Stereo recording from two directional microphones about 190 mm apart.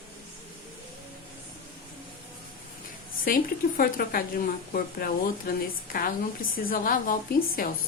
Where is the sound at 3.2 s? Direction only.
50° left (ahead or behind).